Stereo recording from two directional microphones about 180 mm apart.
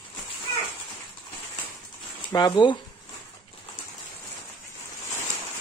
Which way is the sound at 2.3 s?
25° left (ahead or behind).